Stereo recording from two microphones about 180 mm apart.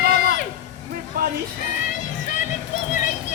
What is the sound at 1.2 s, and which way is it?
Speech, 55° right (ahead or behind).